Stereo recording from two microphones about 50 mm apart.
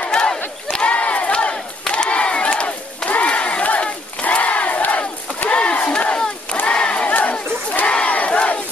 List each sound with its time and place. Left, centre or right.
0.1 s battle cry: centre
0.7 s battle cry: left
7.1 s battle cry: left
7.9 s crowd: left